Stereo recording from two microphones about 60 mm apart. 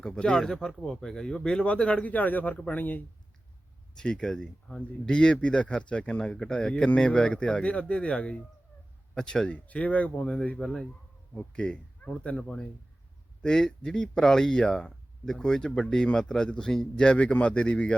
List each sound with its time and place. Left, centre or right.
0.0 s speech: centre
3.9 s speech: centre
9.6 s speech: left